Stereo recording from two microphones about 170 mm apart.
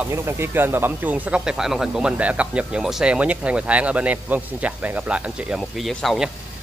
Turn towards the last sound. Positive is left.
turn(degrees=0)  # may be behind; listen again after turning